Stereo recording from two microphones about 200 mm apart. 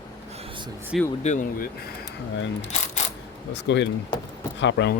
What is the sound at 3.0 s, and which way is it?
Coin, 35° left (ahead or behind).